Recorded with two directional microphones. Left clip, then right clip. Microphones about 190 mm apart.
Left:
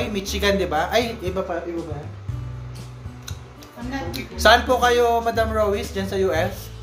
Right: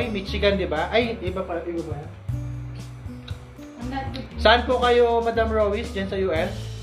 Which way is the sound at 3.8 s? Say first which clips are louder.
Left 2 dB; centre (ahead or behind).